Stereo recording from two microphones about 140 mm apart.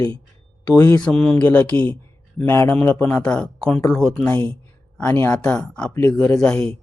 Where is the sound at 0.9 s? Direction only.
5° left (ahead or behind).